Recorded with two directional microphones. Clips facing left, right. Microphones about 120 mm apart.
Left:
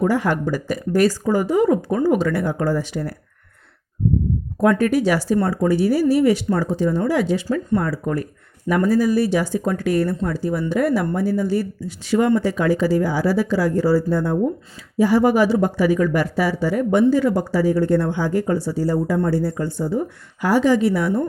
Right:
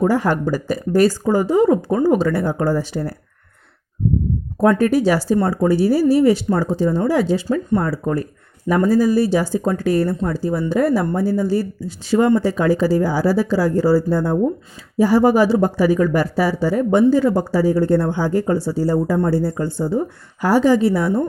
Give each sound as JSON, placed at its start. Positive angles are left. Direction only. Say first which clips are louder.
{"t": 0.0, "sound": "speech", "louder": "right 2 dB", "side_deg": -35}
{"t": 4.6, "sound": "speech", "louder": "right 2 dB", "side_deg": -35}